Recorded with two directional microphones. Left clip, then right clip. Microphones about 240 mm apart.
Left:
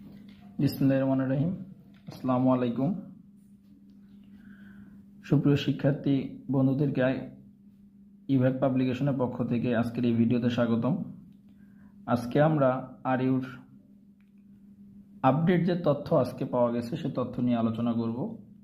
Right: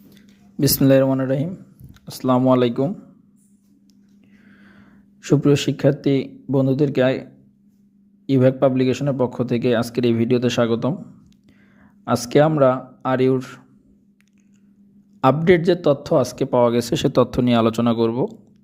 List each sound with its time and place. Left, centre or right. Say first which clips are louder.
0.6 s speech: right 11 dB; right
4.4 s a sound: right 4 dB; right
5.2 s speech: right 9 dB; right
8.3 s speech: right 10 dB; right
12.0 s speech: right 9 dB; right
15.2 s speech: right 10 dB; right